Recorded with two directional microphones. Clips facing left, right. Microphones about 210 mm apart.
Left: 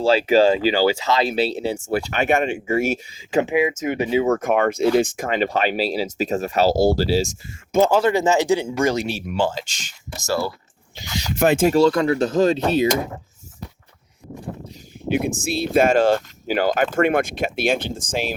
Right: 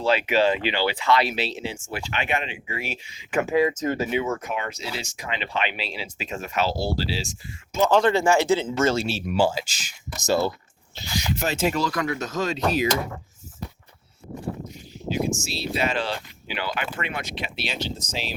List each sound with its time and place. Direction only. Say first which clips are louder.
0.0 s speech: left 6 dB; 30° left (ahead or behind)
3.3 s speech: left 2 dB; 15° left (ahead or behind)
4.1 s speech: left 8 dB; 35° left (ahead or behind)
7.9 s speech: left 2 dB; 10° left (ahead or behind)
9.2 s speech: even; 10° right (ahead or behind)
10.2 s speech: right 1 dB; 20° right (ahead or behind)
11.0 s speech: left 1 dB; 15° left (ahead or behind)
11.3 s speech: left 8 dB; 50° left (ahead or behind)
11.7 s speech: left 10 dB; 30° left (ahead or behind)
15.1 s speech: left 5 dB; 60° left (ahead or behind)